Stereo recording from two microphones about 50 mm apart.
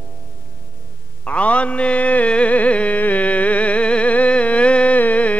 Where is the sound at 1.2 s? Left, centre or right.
Left.